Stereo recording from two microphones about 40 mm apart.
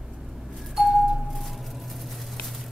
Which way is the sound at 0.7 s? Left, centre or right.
Centre.